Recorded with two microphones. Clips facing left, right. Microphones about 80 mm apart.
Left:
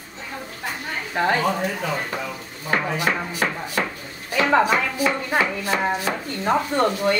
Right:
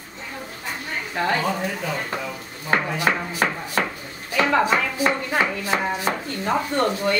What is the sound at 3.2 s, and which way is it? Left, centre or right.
Speech, centre.